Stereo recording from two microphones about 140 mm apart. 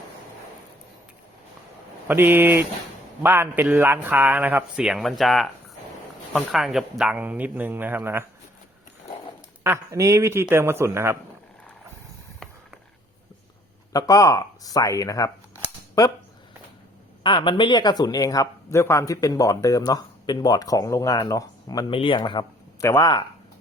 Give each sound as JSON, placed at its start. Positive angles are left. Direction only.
{"t": 2.0, "sound": "speech", "side_deg": -15}
{"t": 9.6, "sound": "speech", "side_deg": -20}
{"t": 12.4, "sound": "a sound", "side_deg": 5}
{"t": 13.9, "sound": "speech", "side_deg": 25}
{"t": 17.2, "sound": "speech", "side_deg": 35}
{"t": 21.9, "sound": "speech", "side_deg": 40}
{"t": 22.8, "sound": "speech", "side_deg": 20}